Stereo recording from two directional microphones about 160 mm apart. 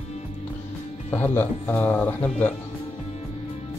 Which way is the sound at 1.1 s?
15° left (ahead or behind).